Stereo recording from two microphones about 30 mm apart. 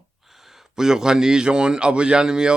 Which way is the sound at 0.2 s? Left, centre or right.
Centre.